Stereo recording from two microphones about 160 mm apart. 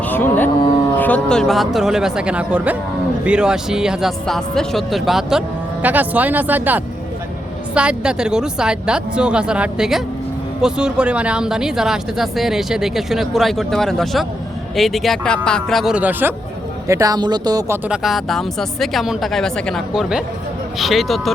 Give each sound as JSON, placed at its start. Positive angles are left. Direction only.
{"t": 0.1, "sound": "a woman's voice", "side_deg": 10}
{"t": 16.9, "sound": "speech", "side_deg": -20}
{"t": 17.8, "sound": "a woman's voice", "side_deg": -5}